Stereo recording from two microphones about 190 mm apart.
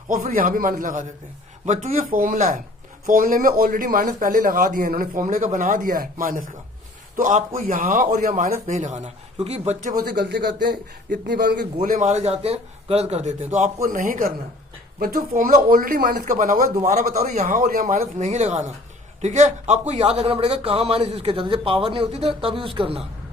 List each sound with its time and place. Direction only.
0.1 s a man's voice: 45° right (ahead or behind)
10.1 s a man's voice: 60° right (ahead or behind)
16.9 s a man's voice: 35° right (ahead or behind)